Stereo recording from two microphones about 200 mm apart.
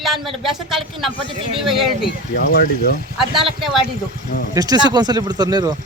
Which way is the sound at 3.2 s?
Centre (ahead or behind).